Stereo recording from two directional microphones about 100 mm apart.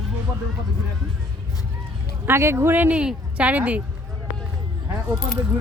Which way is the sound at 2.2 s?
25° right (ahead or behind).